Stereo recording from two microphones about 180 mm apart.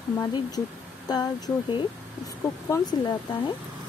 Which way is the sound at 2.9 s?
25° left (ahead or behind).